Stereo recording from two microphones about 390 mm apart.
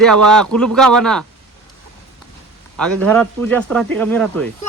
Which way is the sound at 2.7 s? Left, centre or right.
Centre.